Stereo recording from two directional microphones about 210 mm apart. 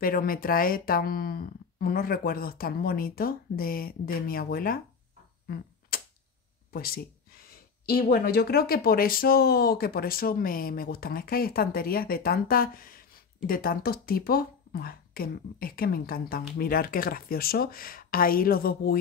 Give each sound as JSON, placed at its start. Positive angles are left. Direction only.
{"t": 0.0, "sound": "speech", "side_deg": 45}
{"t": 5.5, "sound": "typewriter", "side_deg": 45}
{"t": 6.7, "sound": "speech", "side_deg": 45}